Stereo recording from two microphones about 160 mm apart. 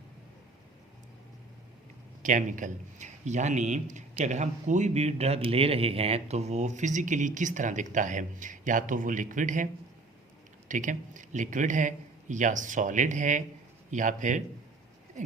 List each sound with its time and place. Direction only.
2.2 s a man's voice: 55° right (ahead or behind)
10.7 s a man's voice: 50° right (ahead or behind)